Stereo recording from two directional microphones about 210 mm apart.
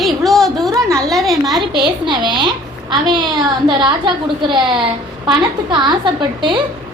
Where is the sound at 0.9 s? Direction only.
15° right (ahead or behind).